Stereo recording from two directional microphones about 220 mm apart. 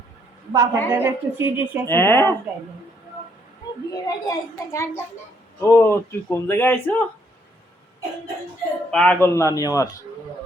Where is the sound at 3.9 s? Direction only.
15° left (ahead or behind).